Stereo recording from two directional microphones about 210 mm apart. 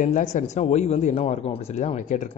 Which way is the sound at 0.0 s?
35° left (ahead or behind).